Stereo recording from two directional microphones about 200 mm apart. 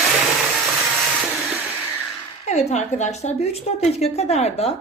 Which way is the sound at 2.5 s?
35° left (ahead or behind).